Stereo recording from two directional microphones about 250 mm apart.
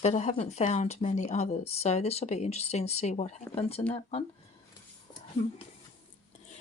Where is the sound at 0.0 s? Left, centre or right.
Left.